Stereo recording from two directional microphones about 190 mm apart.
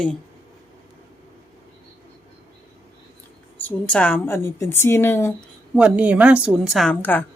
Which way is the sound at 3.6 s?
5° left (ahead or behind).